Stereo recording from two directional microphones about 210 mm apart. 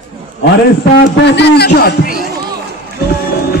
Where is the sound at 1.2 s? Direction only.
55° left (ahead or behind).